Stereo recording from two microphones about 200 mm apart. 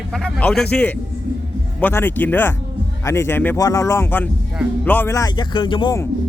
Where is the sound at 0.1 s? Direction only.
5° left (ahead or behind).